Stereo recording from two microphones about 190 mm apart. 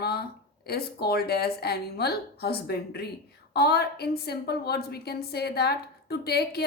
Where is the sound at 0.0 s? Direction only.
55° left (ahead or behind).